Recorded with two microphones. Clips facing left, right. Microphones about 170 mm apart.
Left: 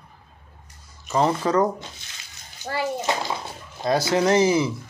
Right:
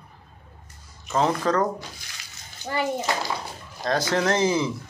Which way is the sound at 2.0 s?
20° left (ahead or behind).